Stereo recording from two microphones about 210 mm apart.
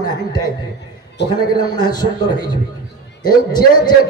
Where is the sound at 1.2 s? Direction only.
55° left (ahead or behind).